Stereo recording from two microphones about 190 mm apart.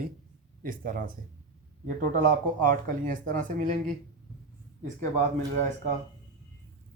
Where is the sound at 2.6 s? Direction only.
45° right (ahead or behind).